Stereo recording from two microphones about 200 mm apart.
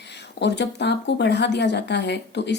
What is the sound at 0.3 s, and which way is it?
A woman's voice, 60° left (ahead or behind).